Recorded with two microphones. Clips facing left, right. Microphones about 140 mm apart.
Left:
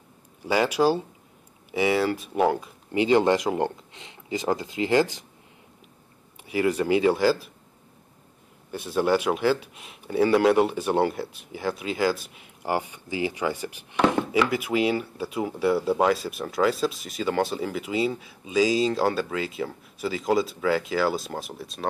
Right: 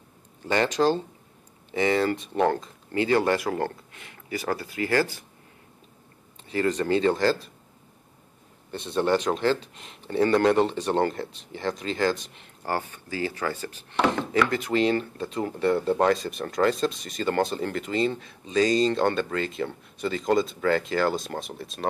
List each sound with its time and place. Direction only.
0.4 s speech: 10° left (ahead or behind)
6.4 s speech: 10° left (ahead or behind)
8.7 s speech: 5° left (ahead or behind)